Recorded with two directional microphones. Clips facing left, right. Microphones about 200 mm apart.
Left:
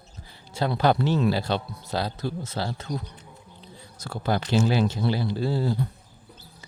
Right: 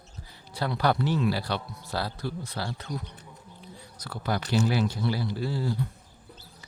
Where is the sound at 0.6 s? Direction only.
25° left (ahead or behind).